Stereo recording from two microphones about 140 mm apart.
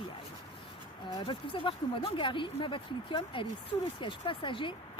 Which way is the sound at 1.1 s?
35° left (ahead or behind).